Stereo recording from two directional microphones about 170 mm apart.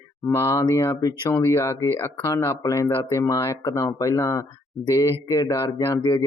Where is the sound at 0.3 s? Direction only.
15° left (ahead or behind).